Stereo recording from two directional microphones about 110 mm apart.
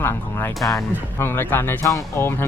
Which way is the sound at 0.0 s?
20° left (ahead or behind).